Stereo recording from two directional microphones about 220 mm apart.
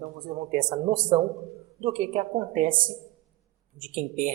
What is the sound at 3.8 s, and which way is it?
Speech, 35° right (ahead or behind).